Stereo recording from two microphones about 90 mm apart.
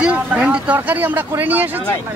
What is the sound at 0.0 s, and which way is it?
Vehicle, 15° right (ahead or behind).